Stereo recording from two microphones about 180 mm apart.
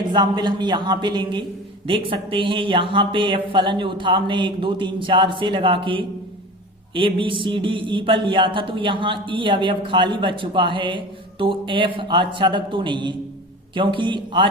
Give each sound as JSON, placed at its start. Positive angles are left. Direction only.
{"t": 0.1, "sound": "a man's voice", "side_deg": -25}